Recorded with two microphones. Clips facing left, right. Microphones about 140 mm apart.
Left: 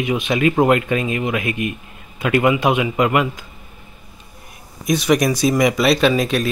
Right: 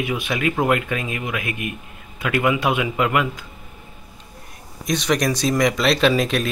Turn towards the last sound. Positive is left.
turn(degrees=0)  # may be behind; listen again after turning